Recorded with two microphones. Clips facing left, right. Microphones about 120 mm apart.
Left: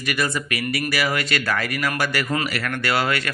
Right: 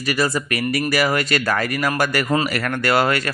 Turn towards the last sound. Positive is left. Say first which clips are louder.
# right 4 dB
turn(degrees=-45)  # may be behind; listen again after turning